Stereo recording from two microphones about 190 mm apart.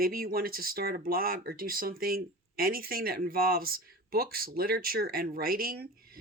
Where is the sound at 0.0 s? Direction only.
50° right (ahead or behind).